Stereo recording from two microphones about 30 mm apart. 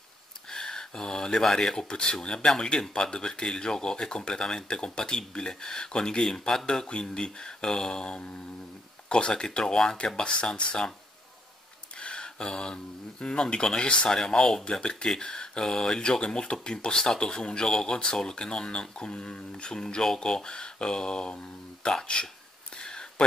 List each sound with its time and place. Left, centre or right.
0.5 s a sound: centre
1.6 s speech: left
6.2 s speech: centre; by 10.8 s left
12.0 s speech: left
14.0 s speech: left
16.0 s speech: left
22.8 s a sound: left